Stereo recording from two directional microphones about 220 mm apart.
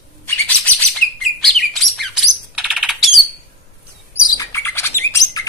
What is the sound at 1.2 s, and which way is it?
Chirp, centre (ahead or behind).